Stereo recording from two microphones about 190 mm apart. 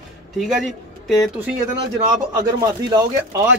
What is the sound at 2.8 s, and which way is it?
Speech, 20° right (ahead or behind).